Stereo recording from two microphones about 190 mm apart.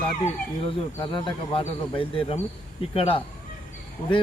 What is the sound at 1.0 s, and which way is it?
Speech, 25° left (ahead or behind).